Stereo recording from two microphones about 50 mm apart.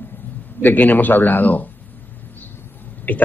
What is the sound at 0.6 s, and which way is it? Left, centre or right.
Speech, left.